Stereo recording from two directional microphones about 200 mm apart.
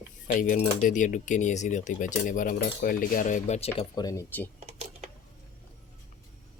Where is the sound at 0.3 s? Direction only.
40° left (ahead or behind).